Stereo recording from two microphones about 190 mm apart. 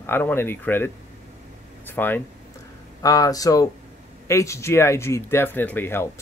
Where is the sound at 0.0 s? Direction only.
10° left (ahead or behind).